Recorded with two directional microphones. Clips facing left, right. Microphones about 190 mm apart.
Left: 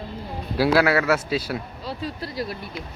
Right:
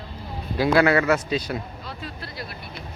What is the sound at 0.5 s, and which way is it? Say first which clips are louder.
Speech: even; 5° left (ahead or behind).